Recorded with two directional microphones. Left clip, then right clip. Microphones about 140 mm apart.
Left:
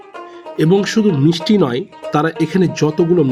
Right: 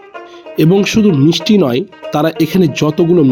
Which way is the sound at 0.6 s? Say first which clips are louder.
Right 2 dB; 15° right (ahead or behind).